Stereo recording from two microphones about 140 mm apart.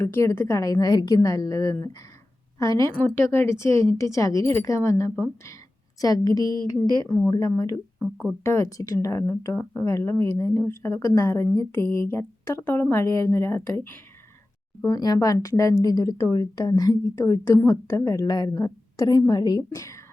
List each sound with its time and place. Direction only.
0.0 s speech: 20° left (ahead or behind)
14.8 s speech: 30° left (ahead or behind)